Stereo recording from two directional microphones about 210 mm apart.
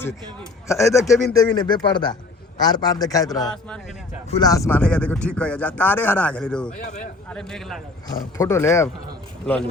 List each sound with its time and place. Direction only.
0.7 s speech: 15° left (ahead or behind)
3.3 s a man's voice: centre (ahead or behind)
4.3 s speech: 20° left (ahead or behind)
6.8 s a man's voice: 35° left (ahead or behind)
7.3 s a man's voice: 5° left (ahead or behind)
8.4 s speech: 15° left (ahead or behind)